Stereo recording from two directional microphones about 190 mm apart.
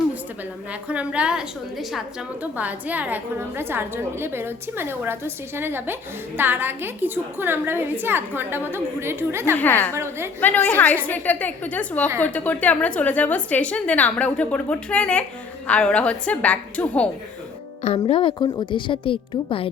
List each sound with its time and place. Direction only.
0.7 s a woman's voice: 5° right (ahead or behind)
9.6 s a woman's voice: 10° left (ahead or behind)
9.9 s a woman's voice: 15° right (ahead or behind)
10.4 s a woman's voice: 10° left (ahead or behind)
17.8 s a woman's voice: 25° left (ahead or behind)